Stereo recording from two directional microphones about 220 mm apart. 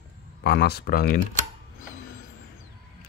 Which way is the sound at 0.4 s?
45° left (ahead or behind).